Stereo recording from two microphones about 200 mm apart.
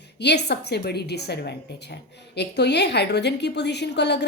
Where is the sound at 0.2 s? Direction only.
55° left (ahead or behind).